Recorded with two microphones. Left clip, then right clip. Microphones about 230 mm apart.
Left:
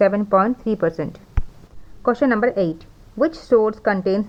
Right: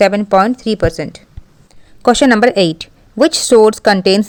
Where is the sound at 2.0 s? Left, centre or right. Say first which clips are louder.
Right 8 dB; right.